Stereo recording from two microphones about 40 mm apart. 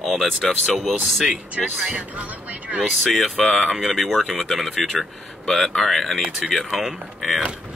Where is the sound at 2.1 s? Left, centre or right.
Right.